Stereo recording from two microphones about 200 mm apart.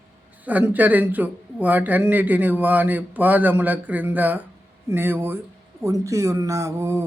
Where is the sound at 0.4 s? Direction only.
10° right (ahead or behind).